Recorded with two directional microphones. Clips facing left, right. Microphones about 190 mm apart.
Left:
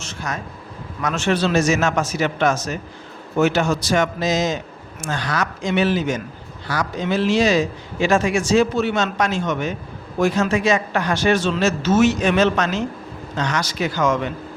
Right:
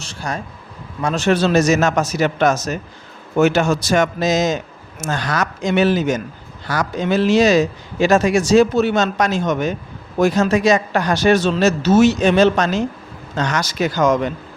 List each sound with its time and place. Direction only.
0.0 s vehicle: 30° right (ahead or behind)
1.0 s speech: 35° right (ahead or behind)